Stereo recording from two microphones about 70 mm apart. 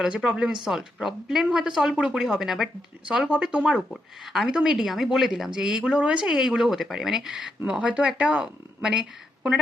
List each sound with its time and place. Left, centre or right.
0.0 s speech: centre
7.6 s speech: centre